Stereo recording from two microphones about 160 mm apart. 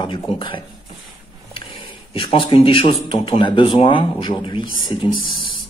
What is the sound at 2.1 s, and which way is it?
Speech, 35° left (ahead or behind).